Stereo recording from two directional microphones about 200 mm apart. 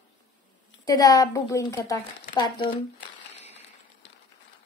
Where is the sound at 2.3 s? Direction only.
25° left (ahead or behind).